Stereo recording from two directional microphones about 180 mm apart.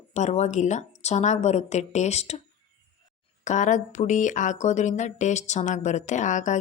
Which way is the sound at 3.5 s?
45° left (ahead or behind).